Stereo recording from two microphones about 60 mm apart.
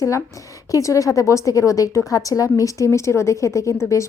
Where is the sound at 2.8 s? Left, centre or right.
Left.